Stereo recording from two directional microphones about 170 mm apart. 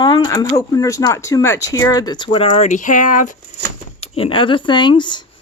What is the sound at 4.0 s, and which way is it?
Speech, 35° left (ahead or behind).